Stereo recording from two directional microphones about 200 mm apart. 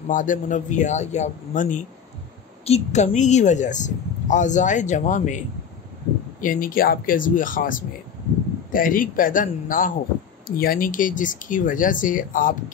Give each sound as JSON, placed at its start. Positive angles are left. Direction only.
{"t": 0.1, "sound": "speech", "side_deg": 40}
{"t": 6.4, "sound": "speech", "side_deg": 45}